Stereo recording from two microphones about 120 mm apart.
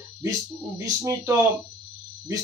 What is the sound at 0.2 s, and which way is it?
A man's voice, 30° right (ahead or behind).